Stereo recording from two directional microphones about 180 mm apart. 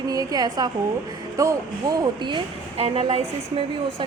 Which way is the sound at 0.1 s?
20° right (ahead or behind).